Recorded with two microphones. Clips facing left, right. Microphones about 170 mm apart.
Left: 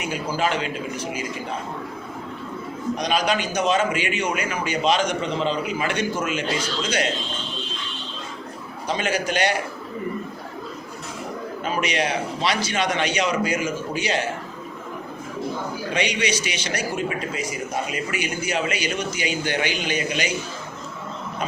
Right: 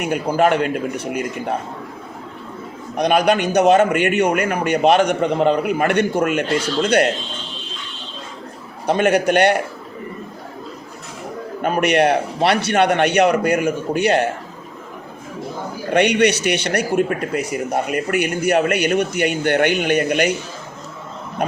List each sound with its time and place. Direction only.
0.0 s a man's voice: 60° right (ahead or behind)
2.9 s a man's voice: 60° right (ahead or behind)
8.9 s a man's voice: 60° right (ahead or behind)
11.6 s a man's voice: 60° right (ahead or behind)
15.9 s a man's voice: 60° right (ahead or behind)